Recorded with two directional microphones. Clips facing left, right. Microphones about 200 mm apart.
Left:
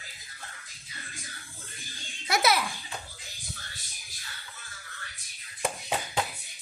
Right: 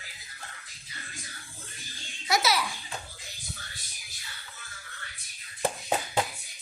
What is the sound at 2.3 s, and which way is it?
Baby laughter, 55° left (ahead or behind).